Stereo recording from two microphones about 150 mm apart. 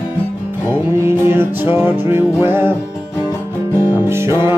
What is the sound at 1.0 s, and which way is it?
Music, 15° right (ahead or behind).